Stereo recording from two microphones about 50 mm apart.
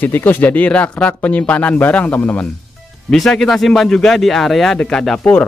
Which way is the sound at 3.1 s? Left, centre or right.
Centre.